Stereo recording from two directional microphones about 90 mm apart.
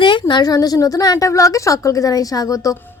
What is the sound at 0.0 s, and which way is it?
A woman's voice, 60° left (ahead or behind).